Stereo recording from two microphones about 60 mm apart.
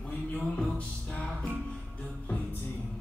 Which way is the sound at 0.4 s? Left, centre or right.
Centre.